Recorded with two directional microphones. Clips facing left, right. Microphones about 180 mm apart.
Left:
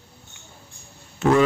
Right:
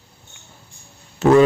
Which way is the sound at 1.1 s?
40° right (ahead or behind).